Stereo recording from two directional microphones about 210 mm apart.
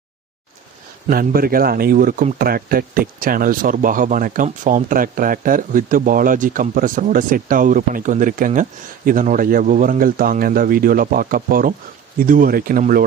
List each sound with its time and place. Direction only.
1.1 s a man's voice: 45° right (ahead or behind)